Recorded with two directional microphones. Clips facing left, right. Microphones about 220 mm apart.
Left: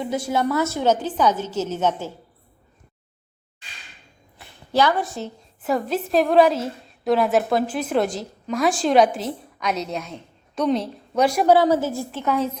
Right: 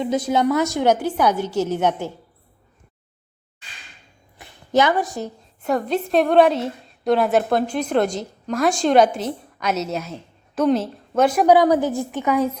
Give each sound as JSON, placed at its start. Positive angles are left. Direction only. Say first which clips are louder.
{"t": 0.0, "sound": "a woman's voice", "louder": "right 3 dB", "side_deg": -20}
{"t": 4.4, "sound": "a sound", "louder": "right 2 dB", "side_deg": -20}
{"t": 5.6, "sound": "a woman's voice", "louder": "right 2 dB", "side_deg": 0}
{"t": 11.4, "sound": "a woman's voice", "louder": "right 2 dB", "side_deg": -15}